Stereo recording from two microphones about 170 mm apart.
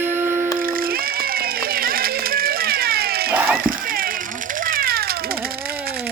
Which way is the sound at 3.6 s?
55° right (ahead or behind).